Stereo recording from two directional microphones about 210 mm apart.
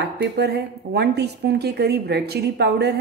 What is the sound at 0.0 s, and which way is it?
Speech, 50° right (ahead or behind).